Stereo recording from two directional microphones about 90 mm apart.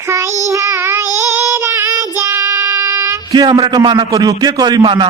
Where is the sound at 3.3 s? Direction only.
55° right (ahead or behind).